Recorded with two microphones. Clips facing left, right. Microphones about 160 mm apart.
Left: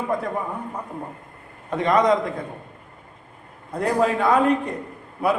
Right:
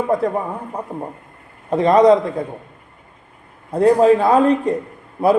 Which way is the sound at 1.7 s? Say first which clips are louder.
Right 7 dB; 35° right (ahead or behind).